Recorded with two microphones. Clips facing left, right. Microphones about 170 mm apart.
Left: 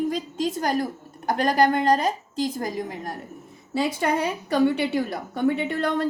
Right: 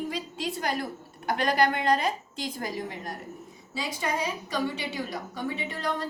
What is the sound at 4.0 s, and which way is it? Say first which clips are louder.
A woman's voice: left 6 dB; 60° left (ahead or behind).